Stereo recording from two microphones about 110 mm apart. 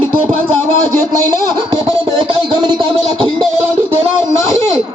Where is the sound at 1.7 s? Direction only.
50° right (ahead or behind).